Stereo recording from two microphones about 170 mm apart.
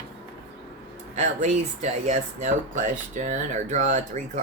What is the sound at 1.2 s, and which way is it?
Speech, 45° right (ahead or behind).